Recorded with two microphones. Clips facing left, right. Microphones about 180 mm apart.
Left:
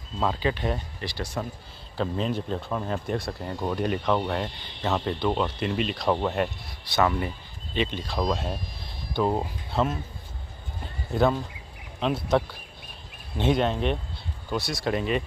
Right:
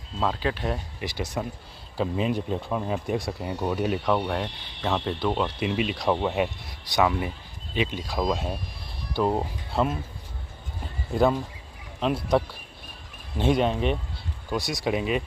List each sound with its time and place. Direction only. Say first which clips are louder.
0.2 s speech: left 1 dB; centre (ahead or behind)
1.0 s speech: right 2 dB; 20° right (ahead or behind)
2.0 s speech: right 2 dB; 10° right (ahead or behind)
11.1 s speech: right 1 dB; 10° right (ahead or behind)
14.5 s speech: right 1 dB; 15° right (ahead or behind)
14.9 s speech: even; 5° right (ahead or behind)